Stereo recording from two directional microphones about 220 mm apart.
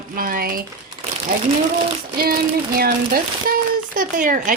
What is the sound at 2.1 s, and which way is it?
Speech, 40° right (ahead or behind).